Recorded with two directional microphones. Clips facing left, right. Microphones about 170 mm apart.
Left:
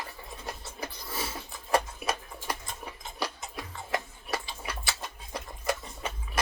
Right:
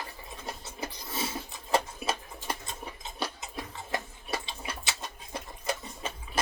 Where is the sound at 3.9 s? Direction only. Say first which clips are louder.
Left 2 dB; 25° right (ahead or behind).